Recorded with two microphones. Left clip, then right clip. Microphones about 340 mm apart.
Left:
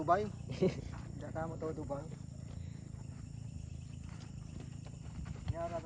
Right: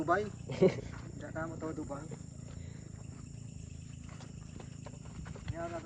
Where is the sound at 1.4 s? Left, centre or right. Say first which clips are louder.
Right 1 dB; centre.